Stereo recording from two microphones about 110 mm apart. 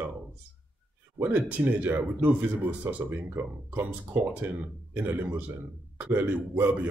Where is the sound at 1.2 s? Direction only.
15° right (ahead or behind).